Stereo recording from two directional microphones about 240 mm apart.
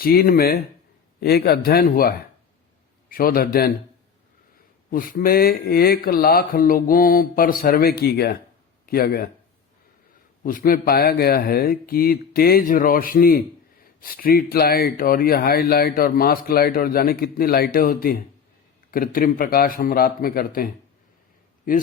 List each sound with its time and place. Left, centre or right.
0.0 s speech: left
4.9 s speech: left
10.4 s speech: left